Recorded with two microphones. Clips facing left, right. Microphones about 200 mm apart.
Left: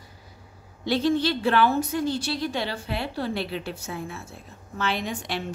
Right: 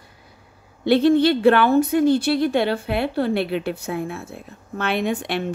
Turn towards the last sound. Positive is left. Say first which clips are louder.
# right 7 dB
turn(degrees=-60)  # may be behind; listen again after turning